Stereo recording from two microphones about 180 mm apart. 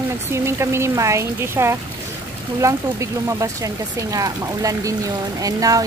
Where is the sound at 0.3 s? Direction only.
15° right (ahead or behind).